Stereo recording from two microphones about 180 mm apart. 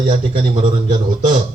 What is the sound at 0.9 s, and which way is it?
Speech, 45° right (ahead or behind).